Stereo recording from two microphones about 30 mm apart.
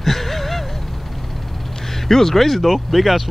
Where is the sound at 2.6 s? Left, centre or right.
Centre.